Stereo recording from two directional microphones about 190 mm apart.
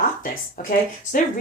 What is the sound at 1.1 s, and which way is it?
Speech, 45° left (ahead or behind).